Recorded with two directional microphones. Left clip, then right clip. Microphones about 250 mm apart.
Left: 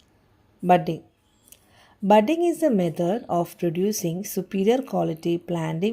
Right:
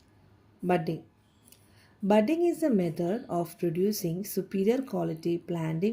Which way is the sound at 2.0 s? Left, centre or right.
Left.